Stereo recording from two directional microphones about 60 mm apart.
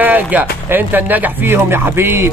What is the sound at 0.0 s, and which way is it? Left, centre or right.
Speech, right.